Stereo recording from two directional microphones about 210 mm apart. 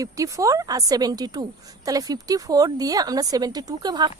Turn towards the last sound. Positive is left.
turn(degrees=-20)  # may be behind; listen again after turning